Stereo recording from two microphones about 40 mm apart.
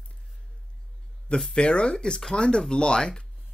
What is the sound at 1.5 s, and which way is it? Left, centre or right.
Speech, left.